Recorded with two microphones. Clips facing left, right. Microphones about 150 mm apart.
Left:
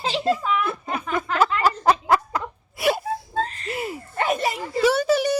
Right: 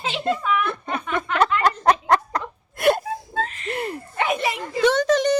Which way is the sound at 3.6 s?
5° left (ahead or behind).